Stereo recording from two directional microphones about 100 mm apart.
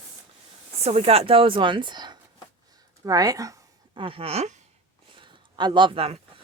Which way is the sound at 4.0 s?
65° right (ahead or behind).